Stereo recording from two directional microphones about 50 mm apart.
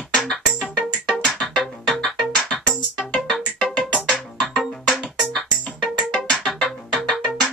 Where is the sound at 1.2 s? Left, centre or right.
Centre.